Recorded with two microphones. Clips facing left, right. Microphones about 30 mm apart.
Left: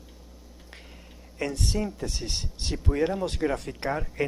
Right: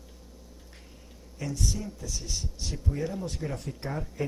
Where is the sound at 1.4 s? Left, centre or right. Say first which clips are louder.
Left 5 dB; left.